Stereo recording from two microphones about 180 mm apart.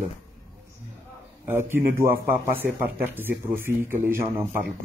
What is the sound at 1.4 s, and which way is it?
Speech, 10° right (ahead or behind).